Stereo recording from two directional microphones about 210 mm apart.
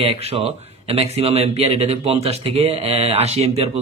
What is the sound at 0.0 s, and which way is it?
Speech, 30° right (ahead or behind).